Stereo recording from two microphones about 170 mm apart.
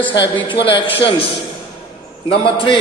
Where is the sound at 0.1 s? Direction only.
25° left (ahead or behind).